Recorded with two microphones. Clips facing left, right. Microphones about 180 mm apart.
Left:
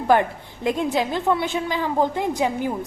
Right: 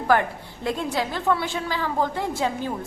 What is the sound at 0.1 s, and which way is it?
A woman's voice, 20° left (ahead or behind).